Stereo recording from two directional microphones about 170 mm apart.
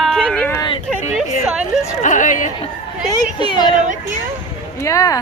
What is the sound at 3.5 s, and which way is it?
Speech, 25° left (ahead or behind).